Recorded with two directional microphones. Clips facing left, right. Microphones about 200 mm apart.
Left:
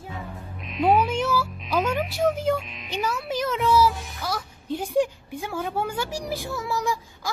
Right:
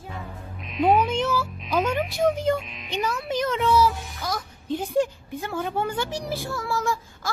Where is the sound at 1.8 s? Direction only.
5° left (ahead or behind).